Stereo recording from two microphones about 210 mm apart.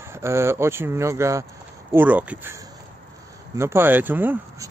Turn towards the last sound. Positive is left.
turn(degrees=-10)  # may be behind; listen again after turning